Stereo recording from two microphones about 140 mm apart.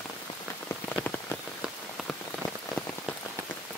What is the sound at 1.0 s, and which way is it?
Rain on surface, 15° left (ahead or behind).